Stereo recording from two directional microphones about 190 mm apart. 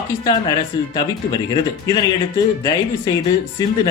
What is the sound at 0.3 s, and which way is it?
Speech, 20° left (ahead or behind).